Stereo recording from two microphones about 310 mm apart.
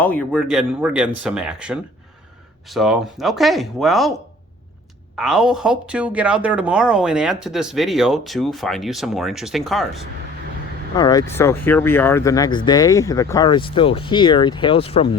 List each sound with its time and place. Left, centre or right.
0.0 s speech: centre
5.1 s speech: centre
10.9 s speech: centre